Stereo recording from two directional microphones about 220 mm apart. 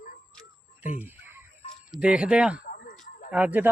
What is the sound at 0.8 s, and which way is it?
Speech, 35° left (ahead or behind).